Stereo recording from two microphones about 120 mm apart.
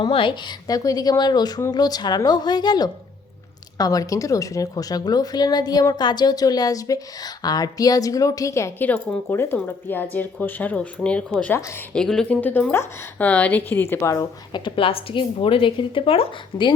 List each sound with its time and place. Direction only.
0.0 s a woman's voice: 45° left (ahead or behind); by 11.5 s 10° left (ahead or behind)
11.5 s a woman's voice: 20° left (ahead or behind)
11.9 s speech: 5° left (ahead or behind); by 14.6 s 25° left (ahead or behind)
14.6 s speech: 50° left (ahead or behind)